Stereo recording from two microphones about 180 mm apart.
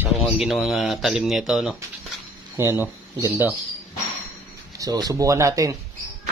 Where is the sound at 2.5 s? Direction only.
15° right (ahead or behind).